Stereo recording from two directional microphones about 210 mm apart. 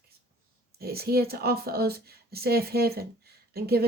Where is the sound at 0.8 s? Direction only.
45° right (ahead or behind).